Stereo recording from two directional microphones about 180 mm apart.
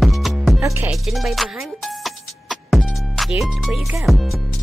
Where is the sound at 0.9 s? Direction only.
Centre (ahead or behind).